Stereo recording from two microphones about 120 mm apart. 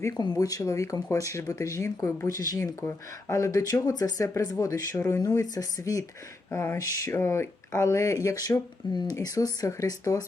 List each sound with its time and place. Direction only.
0.0 s speech: 30° left (ahead or behind)